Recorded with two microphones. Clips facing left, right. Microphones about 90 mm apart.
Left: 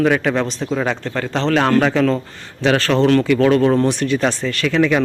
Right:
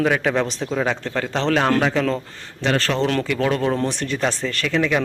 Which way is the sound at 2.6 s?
80° left.